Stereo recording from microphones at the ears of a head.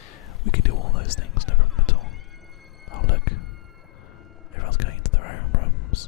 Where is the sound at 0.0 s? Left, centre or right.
Left.